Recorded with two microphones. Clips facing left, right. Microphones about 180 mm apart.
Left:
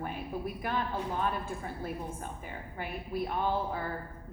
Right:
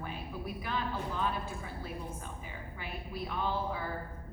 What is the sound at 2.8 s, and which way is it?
A woman's voice, 50° left (ahead or behind).